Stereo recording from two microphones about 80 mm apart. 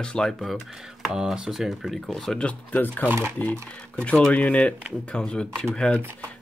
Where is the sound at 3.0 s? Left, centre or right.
Right.